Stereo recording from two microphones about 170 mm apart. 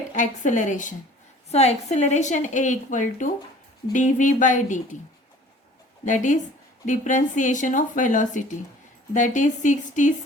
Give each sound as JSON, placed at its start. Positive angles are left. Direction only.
{"t": 0.1, "sound": "a woman's voice", "side_deg": 45}
{"t": 6.1, "sound": "a woman's voice", "side_deg": 45}